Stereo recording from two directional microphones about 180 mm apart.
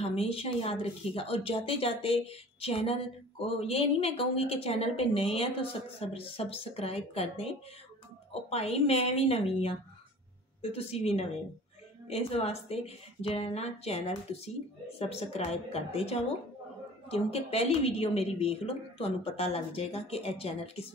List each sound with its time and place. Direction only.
0.0 s speech: 35° left (ahead or behind)